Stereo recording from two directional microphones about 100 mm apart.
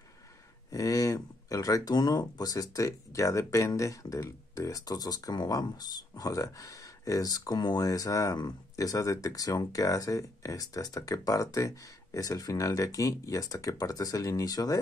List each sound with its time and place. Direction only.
0.7 s speech: 35° left (ahead or behind)